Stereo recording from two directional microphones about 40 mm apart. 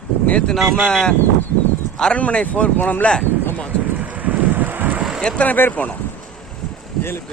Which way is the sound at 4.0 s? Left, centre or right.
Right.